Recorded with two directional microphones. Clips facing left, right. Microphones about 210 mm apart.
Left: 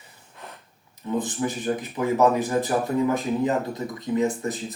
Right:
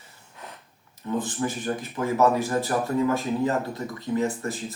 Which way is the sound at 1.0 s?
15° left (ahead or behind).